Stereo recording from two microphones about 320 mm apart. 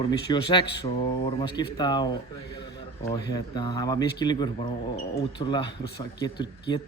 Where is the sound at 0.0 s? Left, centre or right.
Centre.